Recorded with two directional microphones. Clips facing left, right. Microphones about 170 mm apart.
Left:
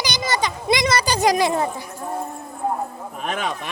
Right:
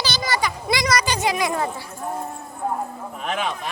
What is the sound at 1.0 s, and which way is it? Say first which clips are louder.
Speech: left 4 dB; 40° left (ahead or behind).